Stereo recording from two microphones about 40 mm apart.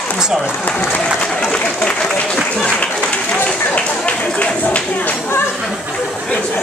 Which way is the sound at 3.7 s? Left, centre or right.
Left.